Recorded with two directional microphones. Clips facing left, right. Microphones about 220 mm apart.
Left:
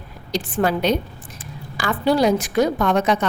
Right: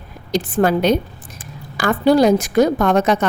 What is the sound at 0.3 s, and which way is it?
A woman's voice, 50° right (ahead or behind).